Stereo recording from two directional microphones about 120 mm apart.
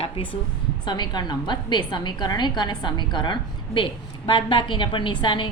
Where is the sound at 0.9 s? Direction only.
35° left (ahead or behind).